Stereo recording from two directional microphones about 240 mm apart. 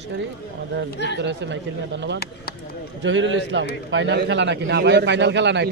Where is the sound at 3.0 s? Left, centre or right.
Right.